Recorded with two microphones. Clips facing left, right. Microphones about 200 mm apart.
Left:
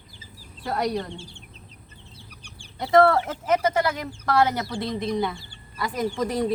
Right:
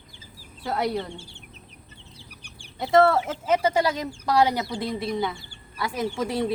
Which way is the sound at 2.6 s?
5° right (ahead or behind).